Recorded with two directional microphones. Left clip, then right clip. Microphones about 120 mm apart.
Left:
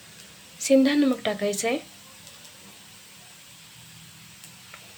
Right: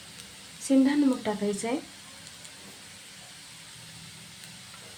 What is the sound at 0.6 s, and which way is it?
Speech, 20° left (ahead or behind).